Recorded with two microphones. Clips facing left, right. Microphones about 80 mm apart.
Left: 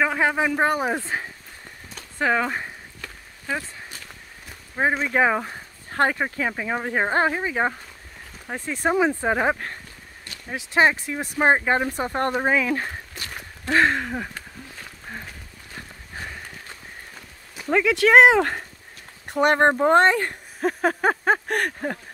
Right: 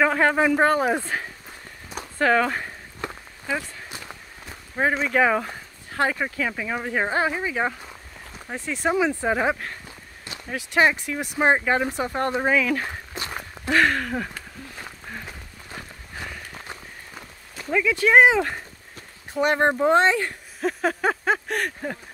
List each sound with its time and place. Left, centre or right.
0.0 s speech: centre
1.1 s a sound: left
2.1 s speech: centre
4.8 s speech: centre
5.1 s speech: left
5.9 s speech: left
13.1 s walk: right
13.7 s speech: left
17.6 s speech: left